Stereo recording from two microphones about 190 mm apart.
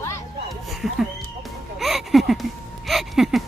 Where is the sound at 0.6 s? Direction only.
Centre (ahead or behind).